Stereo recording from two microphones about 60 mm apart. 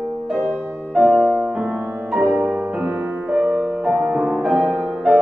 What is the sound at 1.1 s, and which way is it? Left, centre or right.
Music, centre.